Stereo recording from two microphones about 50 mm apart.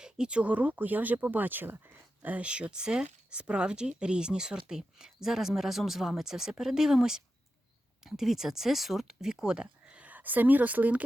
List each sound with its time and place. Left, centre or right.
0.0 s speech: centre; by 2.3 s right
2.3 s speech: right